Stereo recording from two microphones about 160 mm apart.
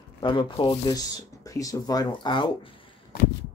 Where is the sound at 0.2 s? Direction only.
30° left (ahead or behind).